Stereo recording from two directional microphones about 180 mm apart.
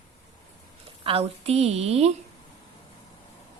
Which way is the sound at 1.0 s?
30° right (ahead or behind).